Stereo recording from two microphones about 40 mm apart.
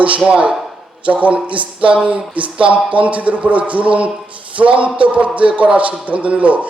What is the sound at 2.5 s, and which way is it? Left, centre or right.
Speech, right.